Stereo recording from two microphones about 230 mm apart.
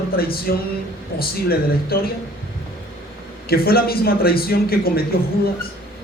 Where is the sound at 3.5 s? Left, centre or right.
Left.